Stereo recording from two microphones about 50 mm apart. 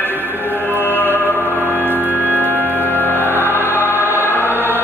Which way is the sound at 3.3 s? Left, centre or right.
Right.